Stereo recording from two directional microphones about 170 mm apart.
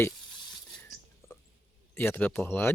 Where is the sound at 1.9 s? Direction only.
10° left (ahead or behind).